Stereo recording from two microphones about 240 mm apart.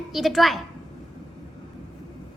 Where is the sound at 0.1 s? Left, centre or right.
Centre.